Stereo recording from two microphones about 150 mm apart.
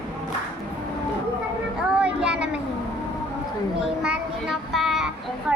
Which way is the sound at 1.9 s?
5° right (ahead or behind).